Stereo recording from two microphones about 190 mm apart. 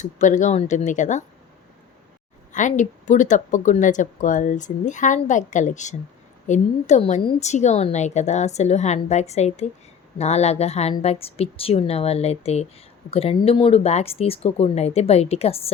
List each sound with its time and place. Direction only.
0.0 s speech: 40° left (ahead or behind)
2.5 s speech: 40° left (ahead or behind)